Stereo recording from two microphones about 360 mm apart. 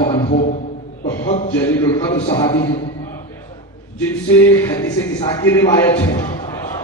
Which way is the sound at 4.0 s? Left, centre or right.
Centre.